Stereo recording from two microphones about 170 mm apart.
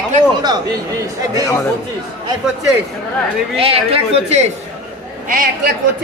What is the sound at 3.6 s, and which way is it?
Speech, 35° right (ahead or behind).